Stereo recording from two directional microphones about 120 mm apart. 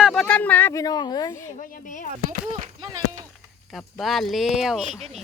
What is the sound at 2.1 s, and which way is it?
Speech, 90° right.